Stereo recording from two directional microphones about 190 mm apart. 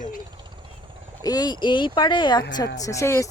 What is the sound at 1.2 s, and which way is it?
Speech, 20° left (ahead or behind).